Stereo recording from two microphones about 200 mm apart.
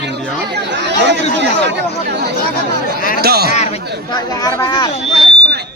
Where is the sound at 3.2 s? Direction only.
50° right (ahead or behind).